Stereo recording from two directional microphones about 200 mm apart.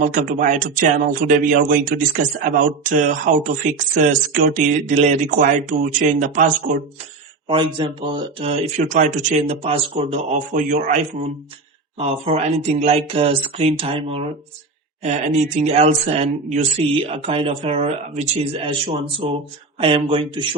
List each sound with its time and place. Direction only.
0.0 s speech: 40° right (ahead or behind)
7.4 s speech: 25° right (ahead or behind)